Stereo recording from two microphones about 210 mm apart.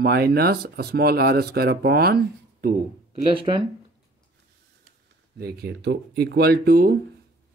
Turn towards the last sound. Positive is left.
turn(degrees=-45)  # may be behind; listen again after turning